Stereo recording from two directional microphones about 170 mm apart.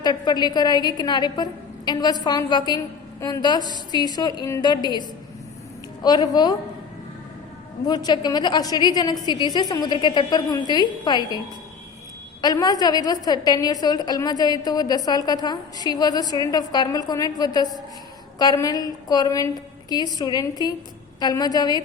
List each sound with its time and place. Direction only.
0.0 s a woman's voice: 25° left (ahead or behind)
7.9 s a woman's voice: 25° left (ahead or behind)
12.4 s a woman's voice: 25° left (ahead or behind)